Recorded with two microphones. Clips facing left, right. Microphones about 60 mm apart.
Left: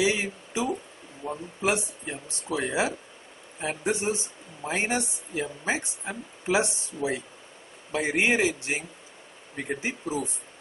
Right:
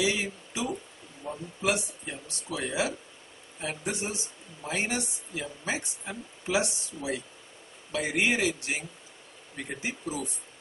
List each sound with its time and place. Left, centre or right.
0.0 s speech: left